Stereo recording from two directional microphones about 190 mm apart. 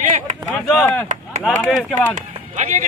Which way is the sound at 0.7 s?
5° left (ahead or behind).